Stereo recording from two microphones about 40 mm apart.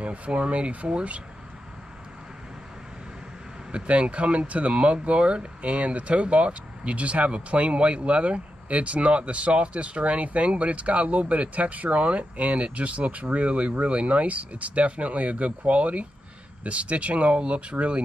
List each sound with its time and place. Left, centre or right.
0.0 s speech: right
3.7 s speech: right